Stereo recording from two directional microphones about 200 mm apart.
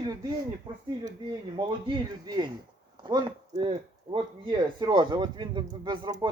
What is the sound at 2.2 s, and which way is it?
Speech, 20° right (ahead or behind).